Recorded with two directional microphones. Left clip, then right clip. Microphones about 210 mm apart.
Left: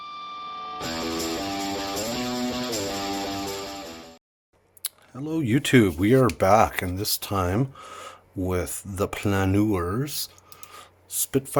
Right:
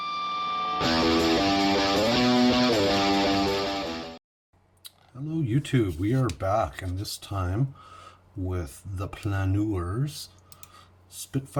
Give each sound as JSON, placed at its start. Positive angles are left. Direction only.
{"t": 0.0, "sound": "music", "side_deg": 0}
{"t": 5.3, "sound": "speech", "side_deg": 55}